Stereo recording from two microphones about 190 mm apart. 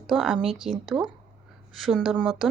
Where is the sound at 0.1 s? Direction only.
Centre (ahead or behind).